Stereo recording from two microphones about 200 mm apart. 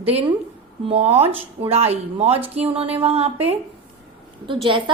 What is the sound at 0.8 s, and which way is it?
A woman's voice, 30° right (ahead or behind).